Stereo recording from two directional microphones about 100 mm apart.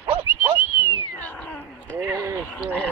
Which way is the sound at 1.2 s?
15° left (ahead or behind).